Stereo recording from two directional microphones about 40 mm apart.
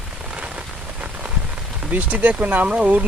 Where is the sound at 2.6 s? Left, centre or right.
Right.